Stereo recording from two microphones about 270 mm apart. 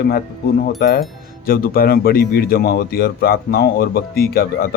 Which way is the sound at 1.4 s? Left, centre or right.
Left.